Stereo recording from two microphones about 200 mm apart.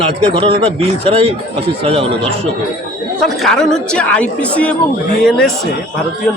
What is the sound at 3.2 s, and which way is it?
Speech, centre (ahead or behind).